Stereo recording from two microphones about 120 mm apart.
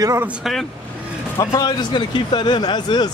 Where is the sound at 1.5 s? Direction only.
40° left (ahead or behind).